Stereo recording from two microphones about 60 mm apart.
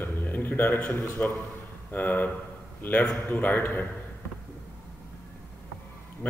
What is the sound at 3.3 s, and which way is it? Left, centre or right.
Speech, left.